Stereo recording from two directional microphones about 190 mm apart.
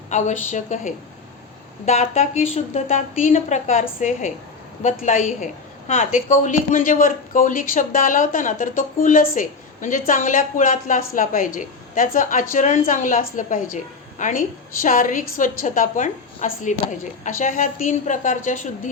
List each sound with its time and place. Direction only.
0.1 s a woman's voice: 40° left (ahead or behind)